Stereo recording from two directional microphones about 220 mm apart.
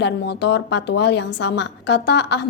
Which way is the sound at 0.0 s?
50° left (ahead or behind).